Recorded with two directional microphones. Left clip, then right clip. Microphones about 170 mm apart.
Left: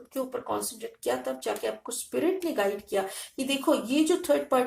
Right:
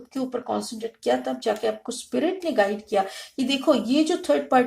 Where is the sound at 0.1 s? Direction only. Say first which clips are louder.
Right 3 dB; 25° right (ahead or behind).